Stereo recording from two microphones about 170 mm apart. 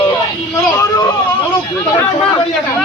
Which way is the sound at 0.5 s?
20° left (ahead or behind).